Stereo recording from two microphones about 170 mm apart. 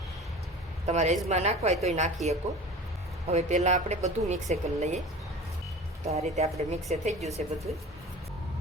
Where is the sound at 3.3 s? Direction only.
40° right (ahead or behind).